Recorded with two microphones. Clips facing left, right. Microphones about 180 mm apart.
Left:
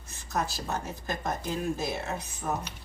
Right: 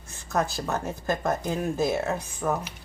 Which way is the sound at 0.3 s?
50° right (ahead or behind).